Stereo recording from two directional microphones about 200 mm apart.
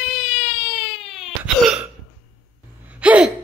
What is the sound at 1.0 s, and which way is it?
Cough, centre (ahead or behind).